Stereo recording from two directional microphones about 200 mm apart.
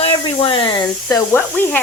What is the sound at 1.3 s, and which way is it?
Speech, 10° left (ahead or behind).